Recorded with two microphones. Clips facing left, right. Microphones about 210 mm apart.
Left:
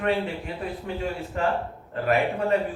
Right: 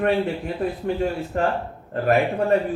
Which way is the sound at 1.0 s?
45° right (ahead or behind).